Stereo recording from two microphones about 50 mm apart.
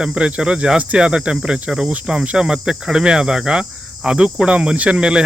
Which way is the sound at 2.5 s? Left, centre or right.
Centre.